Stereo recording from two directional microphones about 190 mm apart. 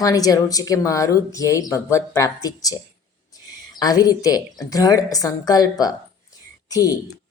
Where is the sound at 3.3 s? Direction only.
20° left (ahead or behind).